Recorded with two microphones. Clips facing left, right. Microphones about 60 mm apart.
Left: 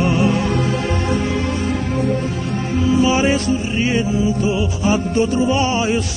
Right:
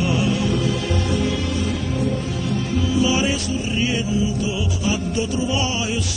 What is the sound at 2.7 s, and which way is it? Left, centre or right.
Music, left.